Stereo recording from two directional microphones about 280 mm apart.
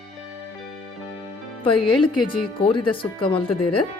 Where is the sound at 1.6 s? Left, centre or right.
Centre.